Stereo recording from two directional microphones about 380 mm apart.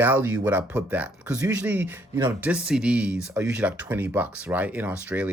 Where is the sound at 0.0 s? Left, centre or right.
Centre.